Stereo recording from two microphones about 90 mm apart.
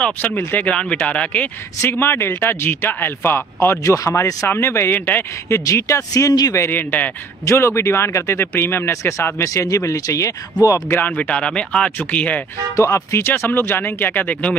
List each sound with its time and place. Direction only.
0.0 s a man's voice: 10° left (ahead or behind)
5.7 s speech: 35° left (ahead or behind)
6.5 s a man's voice: 25° left (ahead or behind)
10.9 s speech: 20° left (ahead or behind)
12.7 s a man's voice: 35° left (ahead or behind); by 14.6 s 15° left (ahead or behind)